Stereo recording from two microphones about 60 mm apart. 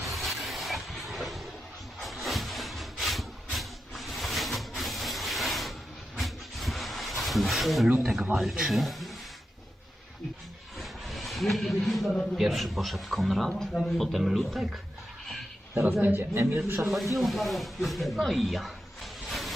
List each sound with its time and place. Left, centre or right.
0.0 s a sound: centre
8.4 s a man's voice: centre
10.8 s a sound: centre
12.4 s a man's voice: centre
15.7 s speech: right
16.8 s a man's voice: centre
19.3 s vehicle: centre